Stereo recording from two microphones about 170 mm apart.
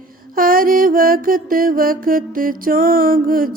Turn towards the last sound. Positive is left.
turn(degrees=-55)  # may be behind; listen again after turning